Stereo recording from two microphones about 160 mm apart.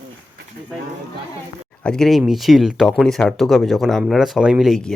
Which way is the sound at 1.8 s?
5° left (ahead or behind).